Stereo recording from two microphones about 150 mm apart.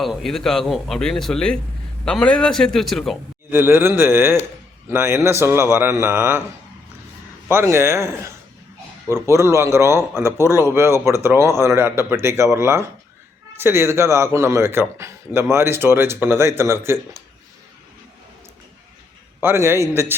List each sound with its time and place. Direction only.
0.0 s speech: centre (ahead or behind)
3.5 s speech: 15° right (ahead or behind)
7.4 s speech: 15° right (ahead or behind)
19.4 s speech: 15° right (ahead or behind)